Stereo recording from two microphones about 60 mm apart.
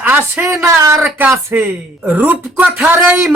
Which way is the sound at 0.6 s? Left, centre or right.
Right.